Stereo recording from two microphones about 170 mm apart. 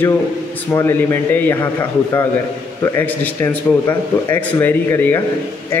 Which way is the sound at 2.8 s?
10° left (ahead or behind).